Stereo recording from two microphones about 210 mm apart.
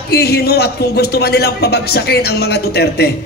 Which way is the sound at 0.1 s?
50° left (ahead or behind).